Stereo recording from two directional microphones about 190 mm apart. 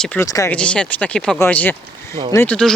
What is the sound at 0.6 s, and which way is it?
Speech, 5° left (ahead or behind).